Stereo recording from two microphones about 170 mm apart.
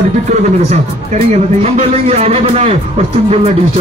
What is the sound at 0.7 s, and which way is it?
A man's voice, 40° right (ahead or behind).